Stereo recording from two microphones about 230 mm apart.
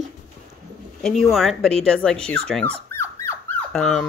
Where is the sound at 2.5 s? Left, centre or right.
Centre.